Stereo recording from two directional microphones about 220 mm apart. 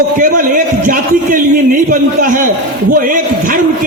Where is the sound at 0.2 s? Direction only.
40° right (ahead or behind).